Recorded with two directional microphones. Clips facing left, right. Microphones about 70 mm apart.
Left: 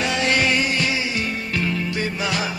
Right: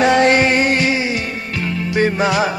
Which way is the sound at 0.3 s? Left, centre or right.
Right.